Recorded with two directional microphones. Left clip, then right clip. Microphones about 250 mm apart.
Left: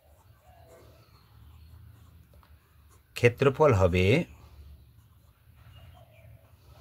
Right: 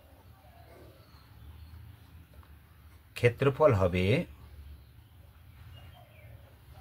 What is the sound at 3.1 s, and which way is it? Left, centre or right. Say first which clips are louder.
Speech: left 3 dB; left.